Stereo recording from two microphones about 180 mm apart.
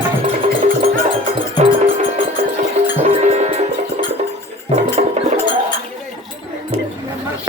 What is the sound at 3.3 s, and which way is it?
Music, 40° right (ahead or behind).